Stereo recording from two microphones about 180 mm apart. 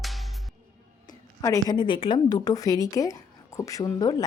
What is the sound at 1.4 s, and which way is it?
Speech, 20° left (ahead or behind).